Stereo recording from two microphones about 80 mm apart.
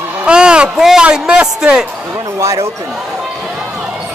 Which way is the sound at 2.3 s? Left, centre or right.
Right.